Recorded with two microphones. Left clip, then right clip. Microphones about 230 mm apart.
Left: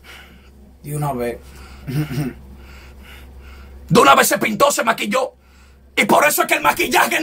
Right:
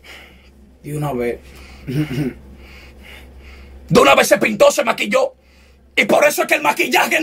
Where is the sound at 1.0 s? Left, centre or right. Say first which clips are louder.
Right 1 dB; centre.